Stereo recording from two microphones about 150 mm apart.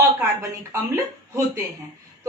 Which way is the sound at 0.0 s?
20° right (ahead or behind).